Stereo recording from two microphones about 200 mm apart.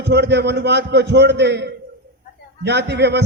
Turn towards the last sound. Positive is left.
turn(degrees=-60)  # may be behind; listen again after turning